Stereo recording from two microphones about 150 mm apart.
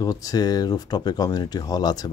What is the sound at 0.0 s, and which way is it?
Speech, 25° left (ahead or behind).